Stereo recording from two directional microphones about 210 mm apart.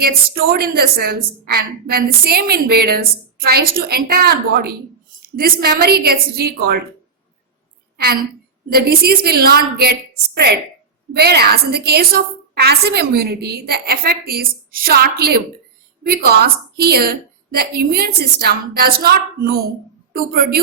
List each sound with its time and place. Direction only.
0.0 s a woman's voice: 45° right (ahead or behind)
8.7 s a woman's voice: 45° right (ahead or behind)